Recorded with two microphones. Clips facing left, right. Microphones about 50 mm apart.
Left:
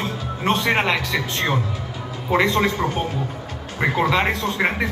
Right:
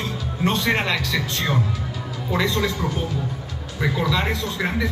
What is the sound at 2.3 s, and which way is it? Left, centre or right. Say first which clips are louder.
Speech: left 4 dB; left.